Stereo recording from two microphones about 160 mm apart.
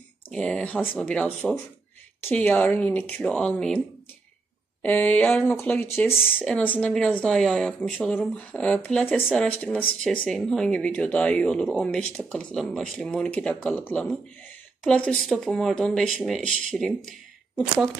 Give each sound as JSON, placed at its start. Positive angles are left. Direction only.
{"t": 0.3, "sound": "speech", "side_deg": 5}
{"t": 4.8, "sound": "speech", "side_deg": 10}
{"t": 6.1, "sound": "speech", "side_deg": 0}